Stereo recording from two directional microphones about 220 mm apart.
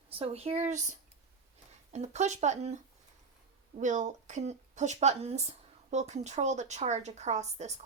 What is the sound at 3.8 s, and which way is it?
Speech, 35° right (ahead or behind).